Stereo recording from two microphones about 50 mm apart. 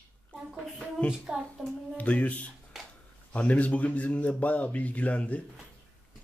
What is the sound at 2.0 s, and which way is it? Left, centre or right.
A man's voice, left.